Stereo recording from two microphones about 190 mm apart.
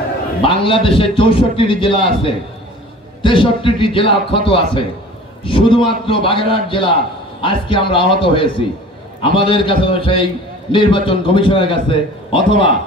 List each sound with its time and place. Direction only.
0.4 s a man's voice: 30° left (ahead or behind)